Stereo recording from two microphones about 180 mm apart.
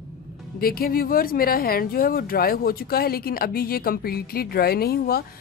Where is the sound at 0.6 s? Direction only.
55° left (ahead or behind).